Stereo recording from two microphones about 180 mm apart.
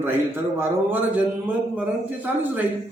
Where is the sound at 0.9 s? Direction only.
10° right (ahead or behind).